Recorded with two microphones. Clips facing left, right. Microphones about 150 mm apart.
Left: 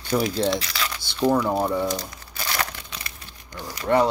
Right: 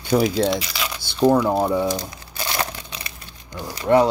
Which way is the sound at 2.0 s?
20° right (ahead or behind).